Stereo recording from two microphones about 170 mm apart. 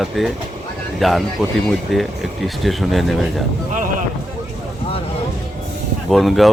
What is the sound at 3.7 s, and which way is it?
Music, 50° right (ahead or behind).